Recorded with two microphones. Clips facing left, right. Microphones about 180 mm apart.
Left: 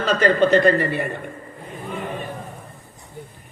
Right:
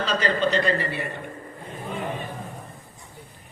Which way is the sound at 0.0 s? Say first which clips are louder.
Left 6 dB; 50° left (ahead or behind).